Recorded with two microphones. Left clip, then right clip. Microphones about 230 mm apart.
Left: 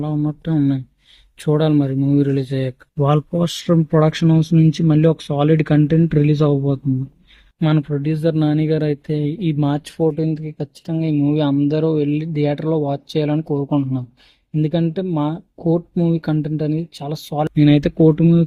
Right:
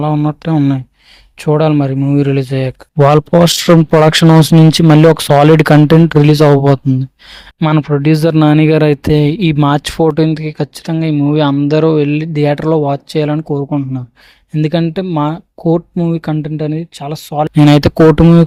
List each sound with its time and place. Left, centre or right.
0.0 s speech: right
7.6 s speech: right
14.5 s speech: right
17.5 s speech: right